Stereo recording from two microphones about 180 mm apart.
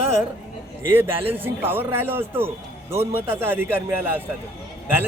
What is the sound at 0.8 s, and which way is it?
A man's voice, 15° right (ahead or behind).